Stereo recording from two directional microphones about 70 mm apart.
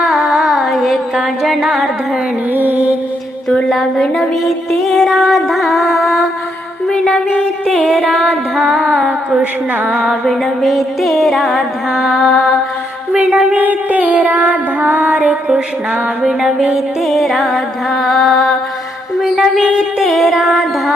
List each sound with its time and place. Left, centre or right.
0.0 s carnatic music: centre
2.5 s female singing: right
3.7 s music: centre
7.9 s music: centre
8.9 s a sound: centre
10.1 s music: centre
13.1 s female singing: centre
16.2 s music: centre